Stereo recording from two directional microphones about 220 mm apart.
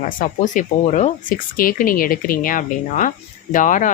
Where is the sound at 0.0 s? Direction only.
35° left (ahead or behind).